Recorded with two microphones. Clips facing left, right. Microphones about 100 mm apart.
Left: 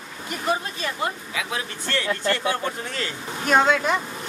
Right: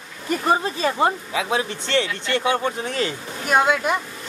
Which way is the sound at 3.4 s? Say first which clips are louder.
Even; 10° right (ahead or behind).